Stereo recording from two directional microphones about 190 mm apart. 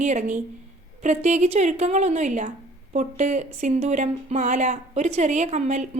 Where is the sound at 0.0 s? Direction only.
40° right (ahead or behind).